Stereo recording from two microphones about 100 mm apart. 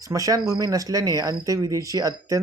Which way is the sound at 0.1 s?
35° right (ahead or behind).